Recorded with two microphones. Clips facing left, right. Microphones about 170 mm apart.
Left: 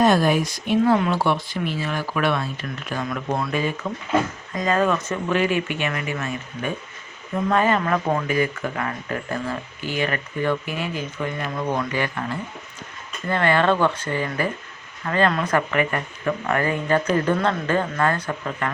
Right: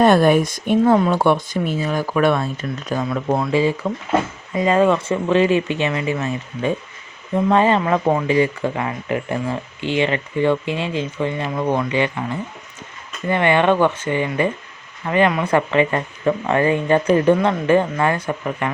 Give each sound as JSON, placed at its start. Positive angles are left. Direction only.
{"t": 0.0, "sound": "speech", "side_deg": -60}
{"t": 0.9, "sound": "speech", "side_deg": -40}
{"t": 1.2, "sound": "speech", "side_deg": -50}
{"t": 2.9, "sound": "speech", "side_deg": -30}
{"t": 3.5, "sound": "speech", "side_deg": -90}
{"t": 4.6, "sound": "speech", "side_deg": -25}